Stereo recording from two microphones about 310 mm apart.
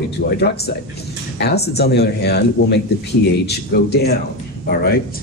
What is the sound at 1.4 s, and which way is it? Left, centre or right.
A man's voice, left.